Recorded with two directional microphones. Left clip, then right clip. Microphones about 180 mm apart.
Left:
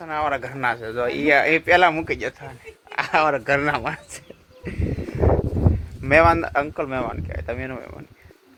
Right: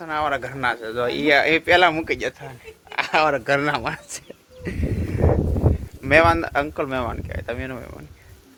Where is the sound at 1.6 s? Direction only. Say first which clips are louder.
Even; 15° right (ahead or behind).